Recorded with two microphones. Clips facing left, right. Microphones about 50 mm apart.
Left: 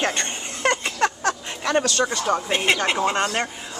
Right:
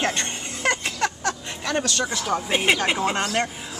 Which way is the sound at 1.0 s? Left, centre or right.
Centre.